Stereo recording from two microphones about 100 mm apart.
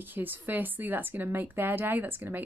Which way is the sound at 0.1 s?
20° right (ahead or behind).